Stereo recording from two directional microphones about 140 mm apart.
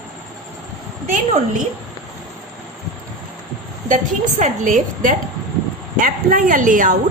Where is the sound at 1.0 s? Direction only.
55° right (ahead or behind).